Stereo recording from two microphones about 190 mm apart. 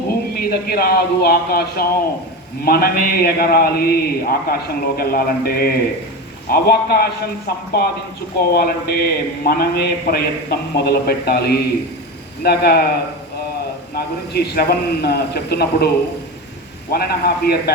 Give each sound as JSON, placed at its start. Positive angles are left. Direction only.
{"t": 0.3, "sound": "a man's voice", "side_deg": 55}
{"t": 13.9, "sound": "a man's voice", "side_deg": 55}
{"t": 16.9, "sound": "a man's voice", "side_deg": 55}